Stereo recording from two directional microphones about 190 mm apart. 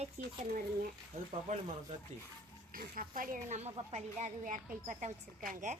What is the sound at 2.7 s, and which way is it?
A woman's voice, 45° right (ahead or behind).